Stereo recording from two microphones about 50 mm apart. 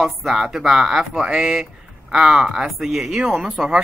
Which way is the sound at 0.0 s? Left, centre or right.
Centre.